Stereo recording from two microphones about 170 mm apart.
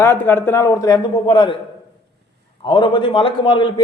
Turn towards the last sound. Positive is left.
turn(degrees=30)  # may be behind; listen again after turning